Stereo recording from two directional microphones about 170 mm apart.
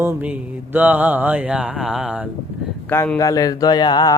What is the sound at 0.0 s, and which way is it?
Mantra, 10° right (ahead or behind).